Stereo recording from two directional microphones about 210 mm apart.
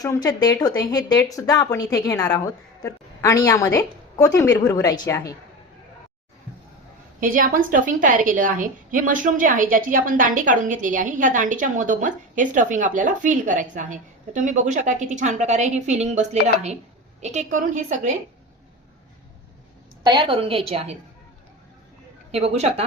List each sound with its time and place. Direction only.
0.0 s a woman's voice: 15° left (ahead or behind)
7.2 s a woman's voice: 40° right (ahead or behind)
20.1 s a woman's voice: 25° right (ahead or behind)
22.3 s a woman's voice: 30° right (ahead or behind)